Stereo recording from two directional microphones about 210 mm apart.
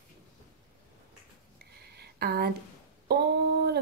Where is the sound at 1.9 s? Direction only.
50° right (ahead or behind).